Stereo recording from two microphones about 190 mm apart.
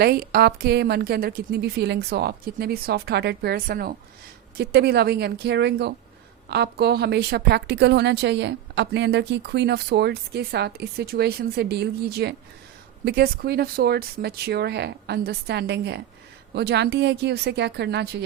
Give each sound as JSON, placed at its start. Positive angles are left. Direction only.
{"t": 0.0, "sound": "a woman's voice", "side_deg": -55}